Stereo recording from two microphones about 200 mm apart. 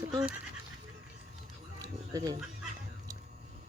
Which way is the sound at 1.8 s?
20° right (ahead or behind).